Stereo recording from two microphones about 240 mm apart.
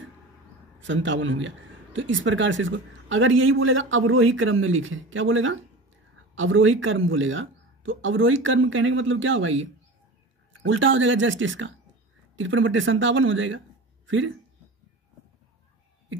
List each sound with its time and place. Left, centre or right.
0.7 s a man's voice: right